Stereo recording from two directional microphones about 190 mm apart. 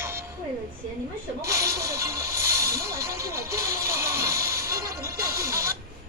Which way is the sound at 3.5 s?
15° right (ahead or behind).